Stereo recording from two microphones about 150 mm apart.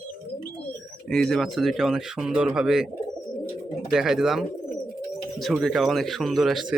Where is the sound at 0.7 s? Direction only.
5° left (ahead or behind).